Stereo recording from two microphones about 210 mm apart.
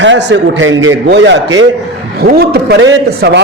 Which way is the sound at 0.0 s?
60° right (ahead or behind).